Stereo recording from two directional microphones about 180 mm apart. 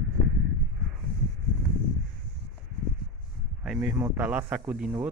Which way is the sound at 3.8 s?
10° right (ahead or behind).